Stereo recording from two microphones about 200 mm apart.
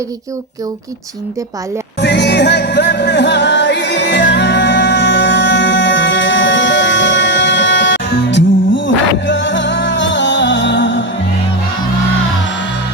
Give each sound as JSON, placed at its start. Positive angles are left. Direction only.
{"t": 2.0, "sound": "music", "side_deg": 55}